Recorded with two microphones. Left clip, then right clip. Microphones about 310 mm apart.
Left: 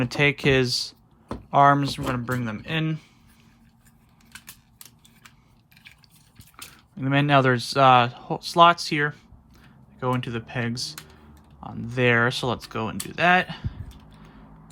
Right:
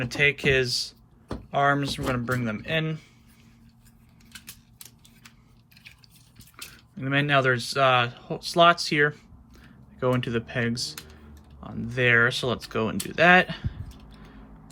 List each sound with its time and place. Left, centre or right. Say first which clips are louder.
0.0 s speech: left 1 dB; centre
6.6 s speech: left 3 dB; centre